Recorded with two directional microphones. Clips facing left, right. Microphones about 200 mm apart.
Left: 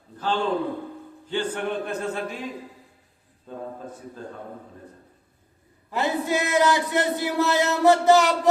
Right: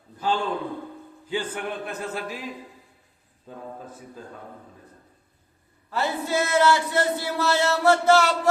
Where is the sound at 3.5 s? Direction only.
10° right (ahead or behind).